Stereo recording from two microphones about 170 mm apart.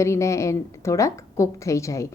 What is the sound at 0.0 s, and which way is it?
A woman's voice, 15° left (ahead or behind).